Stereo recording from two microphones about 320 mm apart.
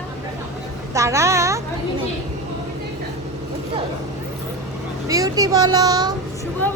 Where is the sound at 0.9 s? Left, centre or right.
Centre.